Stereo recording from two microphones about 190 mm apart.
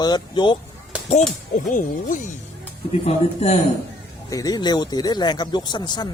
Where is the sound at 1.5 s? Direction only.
45° left (ahead or behind).